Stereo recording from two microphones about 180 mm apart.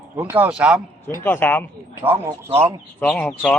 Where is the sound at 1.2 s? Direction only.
10° left (ahead or behind).